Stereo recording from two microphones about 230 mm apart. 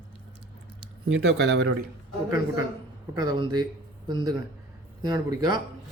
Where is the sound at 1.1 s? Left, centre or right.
Right.